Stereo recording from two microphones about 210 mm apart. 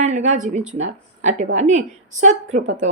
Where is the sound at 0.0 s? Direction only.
35° right (ahead or behind).